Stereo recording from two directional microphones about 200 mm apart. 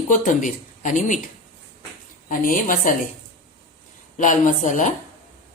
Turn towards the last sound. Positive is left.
turn(degrees=40)  # may be behind; listen again after turning